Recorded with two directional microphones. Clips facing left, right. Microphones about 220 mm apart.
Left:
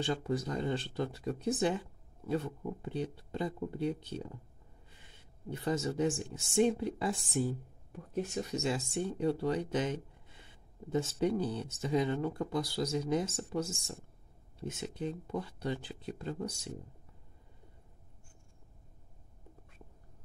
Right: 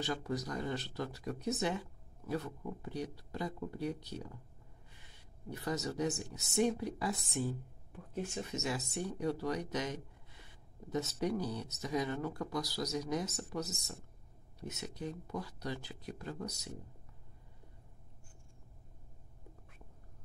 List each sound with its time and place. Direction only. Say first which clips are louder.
0.0 s speech: left 4 dB; 30° left (ahead or behind)
5.5 s speech: left 4 dB; 25° left (ahead or behind)